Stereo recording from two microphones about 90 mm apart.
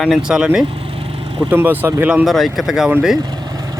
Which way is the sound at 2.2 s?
Centre (ahead or behind).